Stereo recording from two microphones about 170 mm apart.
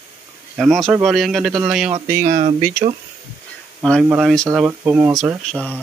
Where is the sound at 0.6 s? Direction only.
Centre (ahead or behind).